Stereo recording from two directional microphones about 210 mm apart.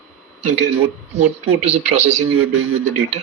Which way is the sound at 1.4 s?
30° right (ahead or behind).